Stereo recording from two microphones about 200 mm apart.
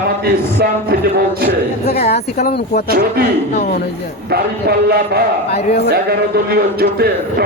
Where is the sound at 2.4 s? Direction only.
50° left (ahead or behind).